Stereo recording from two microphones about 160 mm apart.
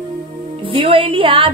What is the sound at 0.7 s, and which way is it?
Speech, 35° right (ahead or behind).